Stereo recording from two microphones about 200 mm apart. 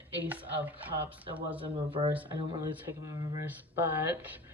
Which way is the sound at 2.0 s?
30° right (ahead or behind).